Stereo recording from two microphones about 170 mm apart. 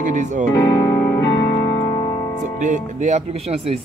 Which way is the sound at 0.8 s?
15° left (ahead or behind).